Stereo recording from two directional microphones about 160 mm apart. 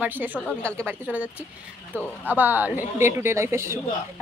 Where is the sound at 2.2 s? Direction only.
10° right (ahead or behind).